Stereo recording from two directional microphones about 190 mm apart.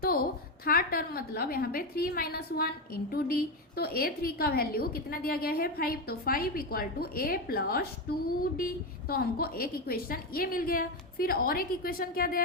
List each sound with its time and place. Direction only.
0.0 s a woman's voice: 50° left (ahead or behind)